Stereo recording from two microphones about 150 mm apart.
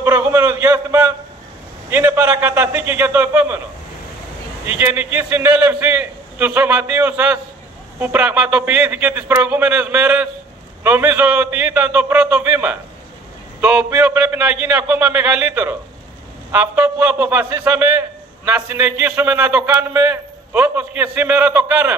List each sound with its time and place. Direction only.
0.0 s a sound: 15° right (ahead or behind)
1.9 s a man's voice: 15° right (ahead or behind)
4.6 s a man's voice: 15° right (ahead or behind)